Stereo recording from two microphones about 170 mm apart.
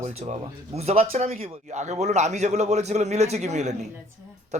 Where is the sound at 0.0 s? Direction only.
40° right (ahead or behind).